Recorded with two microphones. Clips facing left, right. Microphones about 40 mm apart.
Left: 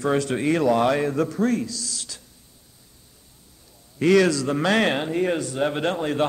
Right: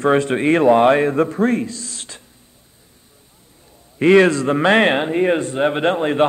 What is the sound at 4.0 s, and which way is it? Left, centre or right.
A man's voice, right.